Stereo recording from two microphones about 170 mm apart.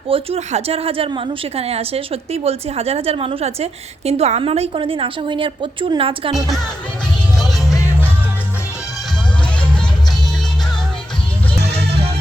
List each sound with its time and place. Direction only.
0.1 s a woman's voice: 35° right (ahead or behind)
11.7 s music: 75° right (ahead or behind)